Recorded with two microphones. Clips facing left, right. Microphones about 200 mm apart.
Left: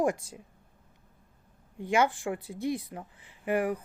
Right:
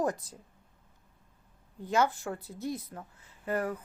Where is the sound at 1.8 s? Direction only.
15° left (ahead or behind).